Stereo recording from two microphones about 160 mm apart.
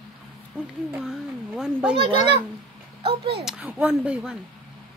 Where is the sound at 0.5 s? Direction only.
10° right (ahead or behind).